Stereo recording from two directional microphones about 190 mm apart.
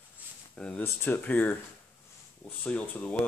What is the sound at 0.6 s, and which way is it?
Speech, 10° left (ahead or behind).